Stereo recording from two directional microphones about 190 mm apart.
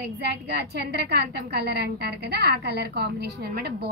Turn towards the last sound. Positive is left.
turn(degrees=-55)  # may be behind; listen again after turning